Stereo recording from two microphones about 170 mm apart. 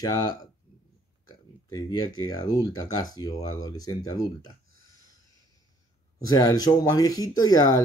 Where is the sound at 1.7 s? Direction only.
20° left (ahead or behind).